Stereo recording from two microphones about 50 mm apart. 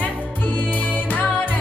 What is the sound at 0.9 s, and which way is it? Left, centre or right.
Music, left.